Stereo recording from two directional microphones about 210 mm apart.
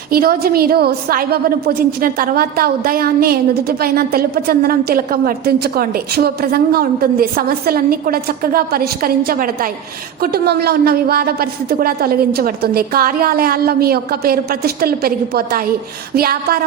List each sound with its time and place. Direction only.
0.1 s a woman's voice: 45° right (ahead or behind)